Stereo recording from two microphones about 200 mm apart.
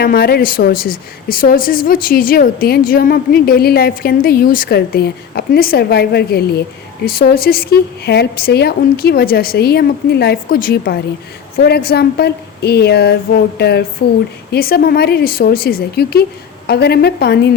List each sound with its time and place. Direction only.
0.0 s a woman's voice: 50° left (ahead or behind)